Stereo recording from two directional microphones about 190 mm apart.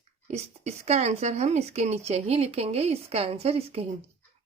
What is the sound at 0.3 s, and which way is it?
A woman's voice, 35° right (ahead or behind).